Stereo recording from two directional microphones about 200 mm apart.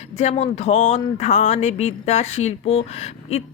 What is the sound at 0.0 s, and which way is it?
Speech, 35° left (ahead or behind).